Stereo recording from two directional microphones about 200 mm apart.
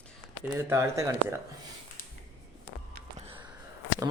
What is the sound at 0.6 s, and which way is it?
Speech, 15° right (ahead or behind).